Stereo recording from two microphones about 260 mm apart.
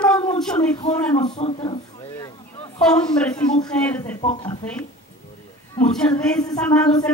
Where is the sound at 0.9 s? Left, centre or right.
Centre.